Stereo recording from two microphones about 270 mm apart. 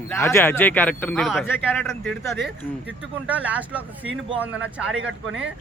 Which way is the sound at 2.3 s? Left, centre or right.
Centre.